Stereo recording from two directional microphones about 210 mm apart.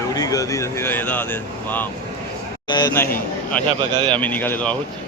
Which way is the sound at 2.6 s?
20° left (ahead or behind).